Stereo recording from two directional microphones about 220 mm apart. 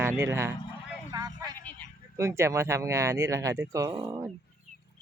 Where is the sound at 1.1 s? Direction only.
15° right (ahead or behind).